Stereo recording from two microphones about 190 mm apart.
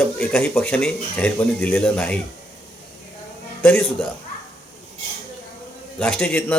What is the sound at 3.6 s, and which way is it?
Speech, 5° left (ahead or behind).